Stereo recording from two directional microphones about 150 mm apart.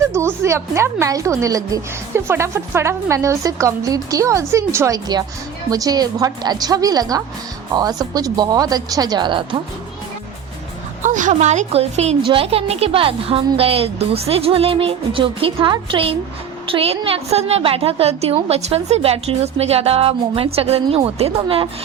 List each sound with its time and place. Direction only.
0.1 s speech: 20° right (ahead or behind)
11.0 s a woman's voice: 55° right (ahead or behind); by 21.7 s 35° right (ahead or behind)